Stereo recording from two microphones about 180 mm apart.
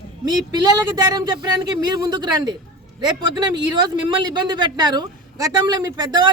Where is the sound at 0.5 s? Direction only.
20° right (ahead or behind).